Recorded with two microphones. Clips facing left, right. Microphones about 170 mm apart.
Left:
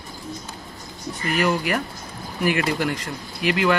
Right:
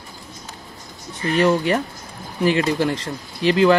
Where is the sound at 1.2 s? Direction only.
30° right (ahead or behind).